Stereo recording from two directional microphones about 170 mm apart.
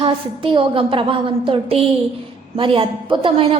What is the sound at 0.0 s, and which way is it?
A woman's voice, 30° right (ahead or behind).